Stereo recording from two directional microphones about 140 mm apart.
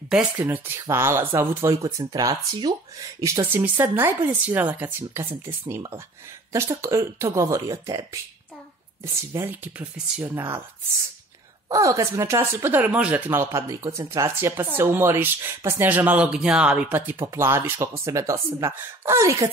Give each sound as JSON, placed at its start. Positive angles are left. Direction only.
{"t": 0.5, "sound": "speech", "side_deg": -20}
{"t": 6.8, "sound": "speech", "side_deg": -20}
{"t": 11.7, "sound": "speech", "side_deg": -25}